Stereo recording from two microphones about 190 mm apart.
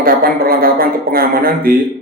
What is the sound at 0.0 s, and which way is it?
Speech, 50° right (ahead or behind).